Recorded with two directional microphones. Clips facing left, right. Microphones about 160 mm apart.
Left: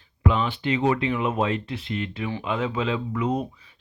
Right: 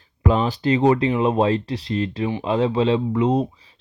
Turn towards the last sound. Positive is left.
turn(degrees=-30)  # may be behind; listen again after turning